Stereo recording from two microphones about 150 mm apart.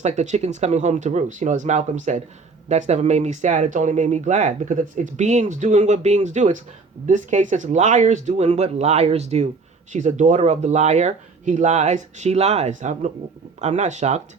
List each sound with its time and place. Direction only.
0.0 s speech: 50° right (ahead or behind)